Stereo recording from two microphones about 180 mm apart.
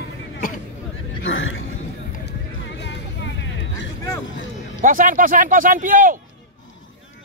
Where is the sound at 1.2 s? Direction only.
90° left.